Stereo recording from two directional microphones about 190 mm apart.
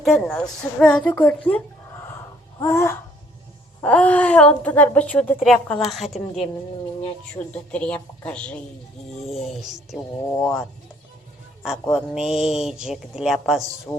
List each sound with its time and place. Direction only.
0.0 s speech: centre (ahead or behind)
12.1 s speech: centre (ahead or behind)